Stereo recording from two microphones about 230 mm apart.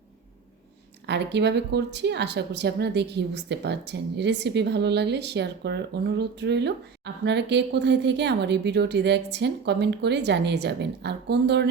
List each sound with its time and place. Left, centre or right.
1.0 s a woman's voice: right